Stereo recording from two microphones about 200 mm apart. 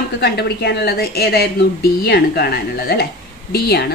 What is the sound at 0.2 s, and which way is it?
Speech, 55° left (ahead or behind).